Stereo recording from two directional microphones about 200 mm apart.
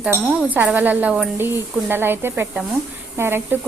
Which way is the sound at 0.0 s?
5° right (ahead or behind).